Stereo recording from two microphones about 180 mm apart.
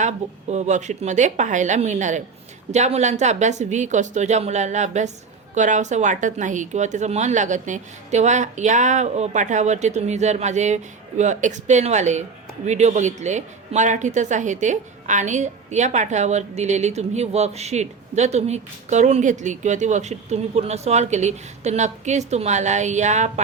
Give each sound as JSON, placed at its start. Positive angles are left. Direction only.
{"t": 0.5, "sound": "a woman's voice", "side_deg": -40}